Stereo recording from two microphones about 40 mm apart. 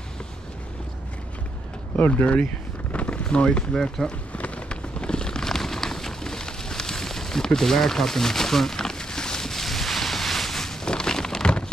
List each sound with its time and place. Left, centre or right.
2.0 s speech: left
2.2 s vehicle: left
3.7 s speech: centre
4.4 s a sound: left